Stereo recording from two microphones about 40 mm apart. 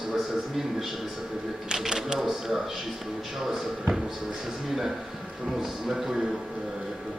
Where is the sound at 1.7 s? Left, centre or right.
Centre.